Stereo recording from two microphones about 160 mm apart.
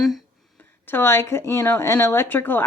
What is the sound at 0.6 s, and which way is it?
Speech, 15° left (ahead or behind).